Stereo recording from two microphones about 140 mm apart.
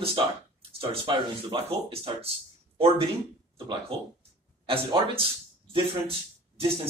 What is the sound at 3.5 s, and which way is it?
Speech, 40° right (ahead or behind).